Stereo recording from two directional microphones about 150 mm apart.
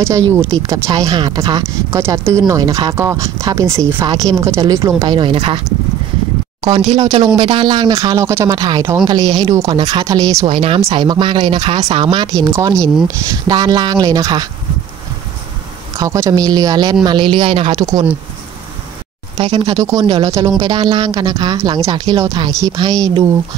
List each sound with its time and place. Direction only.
0.0 s speech: 20° right (ahead or behind); by 5.6 s 35° right (ahead or behind)
7.0 s speech: 25° right (ahead or behind)
10.4 s speech: 40° right (ahead or behind)
16.0 s speech: 20° right (ahead or behind)
19.3 s speech: 40° right (ahead or behind)
19.8 s speech: 20° right (ahead or behind)